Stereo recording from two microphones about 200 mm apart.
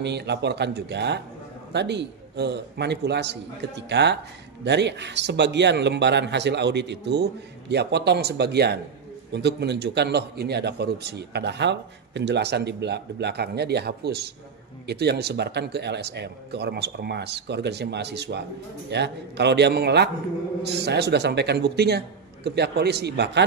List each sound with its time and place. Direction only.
0.0 s a man's voice: 60° right (ahead or behind)